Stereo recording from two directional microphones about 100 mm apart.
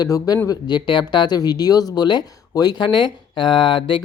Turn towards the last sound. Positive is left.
turn(degrees=55)  # may be behind; listen again after turning